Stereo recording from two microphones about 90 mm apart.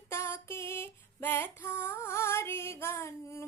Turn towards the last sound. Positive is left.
turn(degrees=30)  # may be behind; listen again after turning